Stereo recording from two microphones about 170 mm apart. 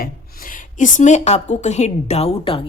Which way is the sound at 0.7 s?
45° left (ahead or behind).